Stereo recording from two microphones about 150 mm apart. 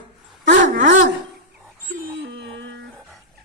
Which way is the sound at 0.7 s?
60° right (ahead or behind).